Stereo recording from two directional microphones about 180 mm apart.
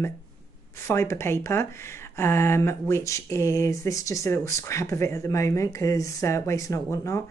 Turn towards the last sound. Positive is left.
turn(degrees=15)  # may be behind; listen again after turning